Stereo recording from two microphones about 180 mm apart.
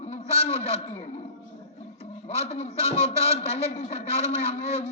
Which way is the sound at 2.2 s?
35° left (ahead or behind).